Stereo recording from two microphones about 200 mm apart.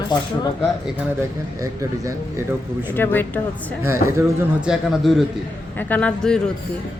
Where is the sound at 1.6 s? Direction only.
15° right (ahead or behind).